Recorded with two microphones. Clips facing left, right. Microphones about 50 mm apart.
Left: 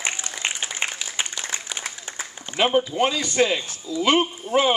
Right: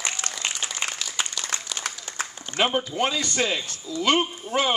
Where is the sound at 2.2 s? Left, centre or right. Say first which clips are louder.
Right 4 dB; right.